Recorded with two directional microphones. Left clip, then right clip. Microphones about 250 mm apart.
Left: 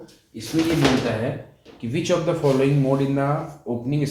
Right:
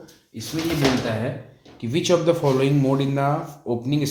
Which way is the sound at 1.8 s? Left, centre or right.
Right.